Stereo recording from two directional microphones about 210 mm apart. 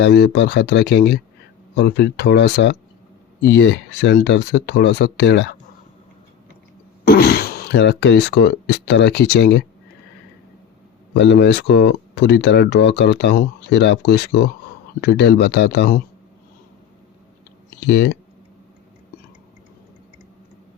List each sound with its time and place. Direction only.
0.0 s speech: 50° left (ahead or behind)
7.0 s speech: 50° left (ahead or behind)
11.1 s speech: 55° left (ahead or behind)
17.8 s speech: 55° left (ahead or behind)